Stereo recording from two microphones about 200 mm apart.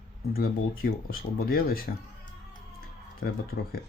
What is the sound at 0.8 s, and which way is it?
Speech, 45° left (ahead or behind).